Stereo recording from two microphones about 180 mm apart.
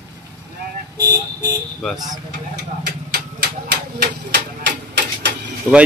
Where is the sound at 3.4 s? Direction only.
65° right (ahead or behind).